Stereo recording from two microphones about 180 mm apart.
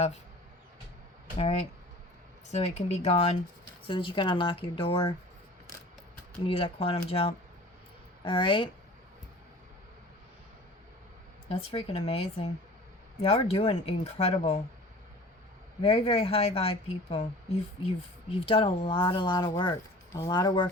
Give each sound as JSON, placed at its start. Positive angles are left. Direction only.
{"t": 1.4, "sound": "a woman's voice", "side_deg": 35}
{"t": 6.5, "sound": "a woman's voice", "side_deg": 30}
{"t": 11.4, "sound": "a woman's voice", "side_deg": 35}
{"t": 15.8, "sound": "a woman's voice", "side_deg": 35}